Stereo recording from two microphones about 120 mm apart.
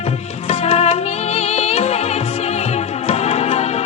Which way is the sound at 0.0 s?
60° left (ahead or behind).